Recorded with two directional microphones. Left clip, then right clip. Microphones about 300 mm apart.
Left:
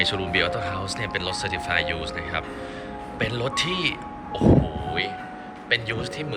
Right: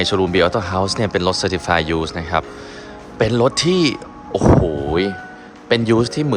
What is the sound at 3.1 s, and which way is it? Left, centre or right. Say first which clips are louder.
Speech: right 10 dB; centre.